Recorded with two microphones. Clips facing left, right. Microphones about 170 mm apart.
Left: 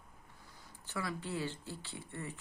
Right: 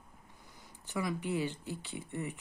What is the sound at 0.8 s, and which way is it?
Speech, 15° right (ahead or behind).